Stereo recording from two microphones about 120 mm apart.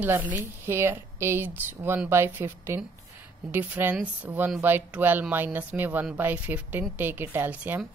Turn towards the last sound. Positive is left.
turn(degrees=-15)  # may be behind; listen again after turning